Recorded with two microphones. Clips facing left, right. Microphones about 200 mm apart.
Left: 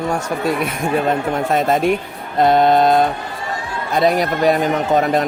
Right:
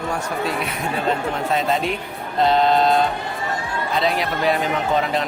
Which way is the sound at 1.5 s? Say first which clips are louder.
Left 6 dB; 50° left (ahead or behind).